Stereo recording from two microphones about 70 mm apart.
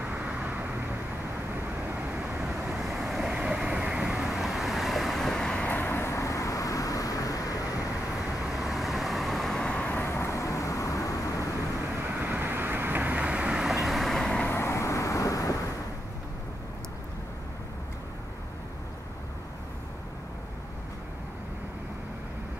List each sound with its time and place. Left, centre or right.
0.0 s vehicle: centre
2.7 s vehicle: centre
5.6 s vehicle: left
8.5 s vehicle: centre
9.8 s vehicle: left
12.1 s vehicle: right; by 14.2 s centre
14.2 s vehicle: centre
14.5 s vehicle: left